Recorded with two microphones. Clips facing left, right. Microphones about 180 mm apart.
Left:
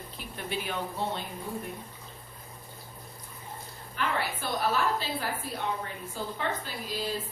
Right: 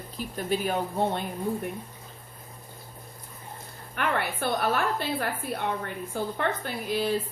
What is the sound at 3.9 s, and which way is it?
A woman's voice, 60° right (ahead or behind).